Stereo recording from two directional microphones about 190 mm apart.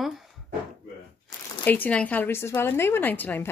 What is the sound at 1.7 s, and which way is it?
Speech, 10° left (ahead or behind).